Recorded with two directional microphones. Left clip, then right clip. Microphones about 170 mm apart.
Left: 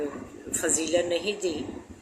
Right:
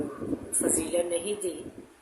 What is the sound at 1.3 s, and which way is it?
Speech, 45° left (ahead or behind).